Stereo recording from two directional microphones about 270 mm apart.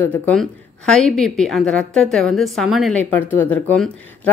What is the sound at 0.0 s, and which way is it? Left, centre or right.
A woman's voice, centre.